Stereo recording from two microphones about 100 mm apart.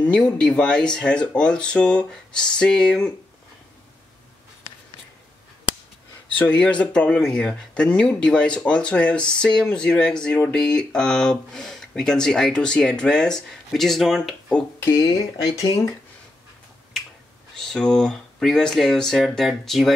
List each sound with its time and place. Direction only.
0.0 s speech: 10° left (ahead or behind)
6.3 s speech: 15° left (ahead or behind)
15.0 s speech: 35° left (ahead or behind)
17.6 s speech: 5° left (ahead or behind)